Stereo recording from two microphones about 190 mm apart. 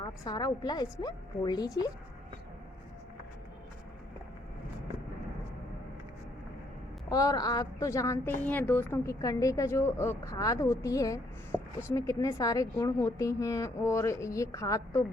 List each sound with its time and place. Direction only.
0.0 s a woman's voice: 20° left (ahead or behind)
7.1 s a woman's voice: 20° left (ahead or behind)
11.5 s a sound: 5° right (ahead or behind)
11.9 s a woman's voice: 15° left (ahead or behind)